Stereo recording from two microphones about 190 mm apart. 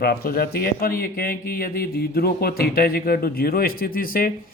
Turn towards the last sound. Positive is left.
turn(degrees=50)  # may be behind; listen again after turning